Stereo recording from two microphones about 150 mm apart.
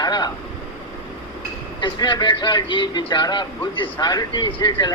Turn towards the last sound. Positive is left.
turn(degrees=30)  # may be behind; listen again after turning